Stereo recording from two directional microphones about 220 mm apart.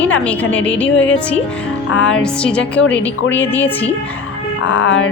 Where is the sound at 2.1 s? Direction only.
5° left (ahead or behind).